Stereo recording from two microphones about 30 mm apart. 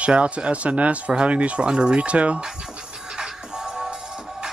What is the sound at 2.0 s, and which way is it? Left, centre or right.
Speech, right.